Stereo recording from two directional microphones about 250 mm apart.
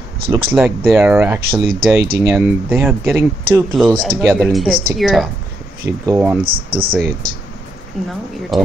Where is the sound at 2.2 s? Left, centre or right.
Centre.